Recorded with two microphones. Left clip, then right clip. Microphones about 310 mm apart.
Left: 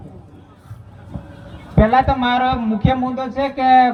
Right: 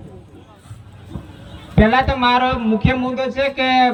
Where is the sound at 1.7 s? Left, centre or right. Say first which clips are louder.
Left 1 dB; centre.